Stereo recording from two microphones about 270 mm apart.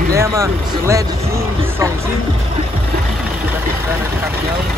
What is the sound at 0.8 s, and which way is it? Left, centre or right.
Vehicle, centre.